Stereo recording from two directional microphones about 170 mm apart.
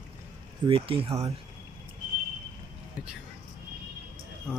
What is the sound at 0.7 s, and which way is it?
Speech, 35° right (ahead or behind).